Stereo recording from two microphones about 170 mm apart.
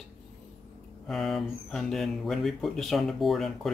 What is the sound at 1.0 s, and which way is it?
Speech, centre (ahead or behind).